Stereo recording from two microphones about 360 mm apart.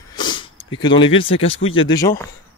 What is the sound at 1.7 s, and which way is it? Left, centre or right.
Speech, left.